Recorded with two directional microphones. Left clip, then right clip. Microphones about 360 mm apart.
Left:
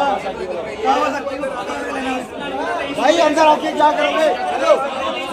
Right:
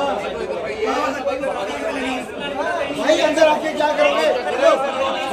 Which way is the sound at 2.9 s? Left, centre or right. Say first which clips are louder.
Left 2 dB; centre.